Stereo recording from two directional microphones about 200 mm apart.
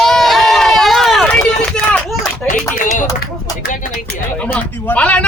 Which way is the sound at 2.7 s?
40° left (ahead or behind).